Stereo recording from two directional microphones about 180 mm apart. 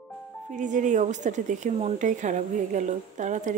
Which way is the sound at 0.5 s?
45° right (ahead or behind).